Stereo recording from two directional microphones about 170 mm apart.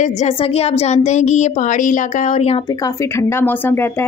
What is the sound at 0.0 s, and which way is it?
Speech, 40° left (ahead or behind).